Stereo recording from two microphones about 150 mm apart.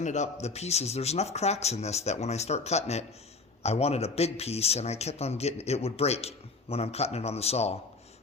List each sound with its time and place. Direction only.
0.0 s a man's voice: 50° left (ahead or behind)